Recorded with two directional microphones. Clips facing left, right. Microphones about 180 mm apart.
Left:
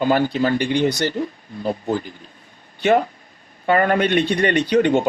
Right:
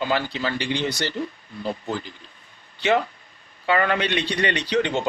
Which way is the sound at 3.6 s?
45° left (ahead or behind).